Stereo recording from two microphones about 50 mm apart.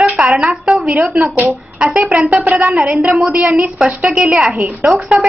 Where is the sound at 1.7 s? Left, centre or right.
Centre.